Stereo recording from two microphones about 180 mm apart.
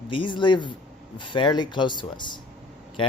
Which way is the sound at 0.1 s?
25° left (ahead or behind).